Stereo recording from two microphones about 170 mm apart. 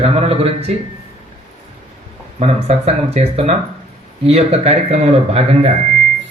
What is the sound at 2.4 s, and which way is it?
Speech, 40° right (ahead or behind).